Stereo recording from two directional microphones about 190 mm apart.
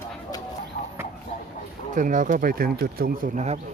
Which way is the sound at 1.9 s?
40° right (ahead or behind).